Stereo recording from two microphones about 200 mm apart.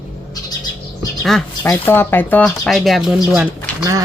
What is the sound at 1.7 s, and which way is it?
Speech, 10° left (ahead or behind).